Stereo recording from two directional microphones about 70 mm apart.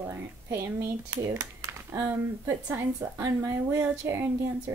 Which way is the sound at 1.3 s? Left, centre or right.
Right.